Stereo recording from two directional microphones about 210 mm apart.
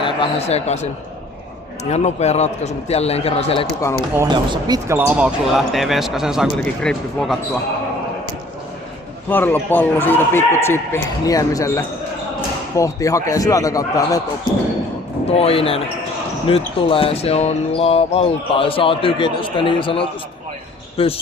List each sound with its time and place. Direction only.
0.0 s a man's voice: 25° left (ahead or behind)
4.2 s speech: 20° right (ahead or behind); by 7.3 s centre (ahead or behind)
9.3 s speech: 10° left (ahead or behind)
15.3 s speech: 30° left (ahead or behind)